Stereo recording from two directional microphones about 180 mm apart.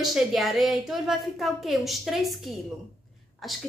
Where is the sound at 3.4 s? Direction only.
Centre (ahead or behind).